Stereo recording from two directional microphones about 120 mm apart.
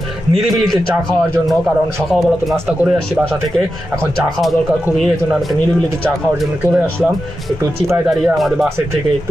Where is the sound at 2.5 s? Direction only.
20° right (ahead or behind).